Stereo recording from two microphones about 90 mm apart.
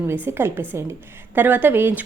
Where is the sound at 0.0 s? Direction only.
25° right (ahead or behind).